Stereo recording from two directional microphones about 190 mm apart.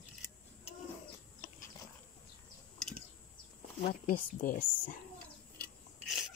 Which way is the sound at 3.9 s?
50° left (ahead or behind).